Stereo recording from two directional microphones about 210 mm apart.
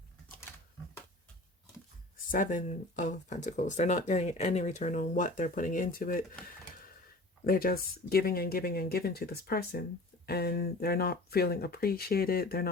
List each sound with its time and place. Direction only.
2.1 s speech: 40° left (ahead or behind)
7.4 s speech: 45° left (ahead or behind)